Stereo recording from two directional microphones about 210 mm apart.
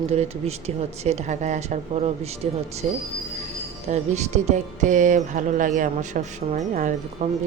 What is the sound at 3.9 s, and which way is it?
Speech, 35° right (ahead or behind).